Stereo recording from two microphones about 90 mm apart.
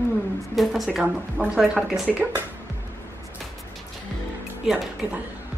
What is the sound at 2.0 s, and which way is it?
Speech, 15° right (ahead or behind).